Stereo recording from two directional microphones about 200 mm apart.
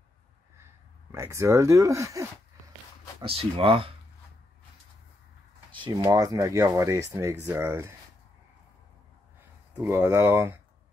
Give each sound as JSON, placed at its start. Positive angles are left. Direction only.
{"t": 1.1, "sound": "speech", "side_deg": -15}
{"t": 3.2, "sound": "speech", "side_deg": -30}
{"t": 6.0, "sound": "speech", "side_deg": -15}
{"t": 9.8, "sound": "speech", "side_deg": -10}